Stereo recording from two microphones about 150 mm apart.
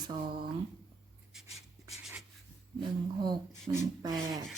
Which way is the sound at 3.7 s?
25° right (ahead or behind).